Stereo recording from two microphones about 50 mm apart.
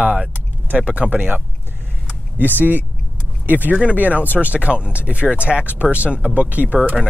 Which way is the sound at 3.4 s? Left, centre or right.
Right.